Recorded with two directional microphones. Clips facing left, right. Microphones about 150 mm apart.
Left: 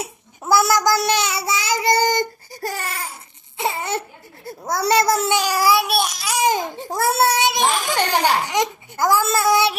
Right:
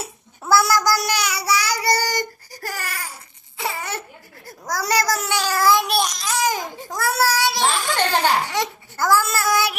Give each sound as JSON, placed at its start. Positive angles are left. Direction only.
{"t": 0.0, "sound": "a child's voice", "side_deg": 20}
{"t": 3.6, "sound": "a sound", "side_deg": 25}
{"t": 4.4, "sound": "a child's voice", "side_deg": 25}
{"t": 6.4, "sound": "a child's voice", "side_deg": 25}